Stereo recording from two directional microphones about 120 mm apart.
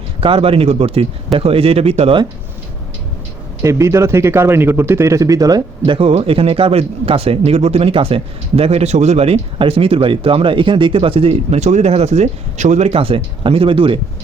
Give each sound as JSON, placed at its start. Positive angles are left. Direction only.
{"t": 0.2, "sound": "speech", "side_deg": -50}
{"t": 3.6, "sound": "speech", "side_deg": -25}